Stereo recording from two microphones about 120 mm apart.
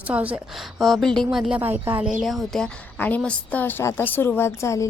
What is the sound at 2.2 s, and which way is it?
A woman's voice, centre (ahead or behind).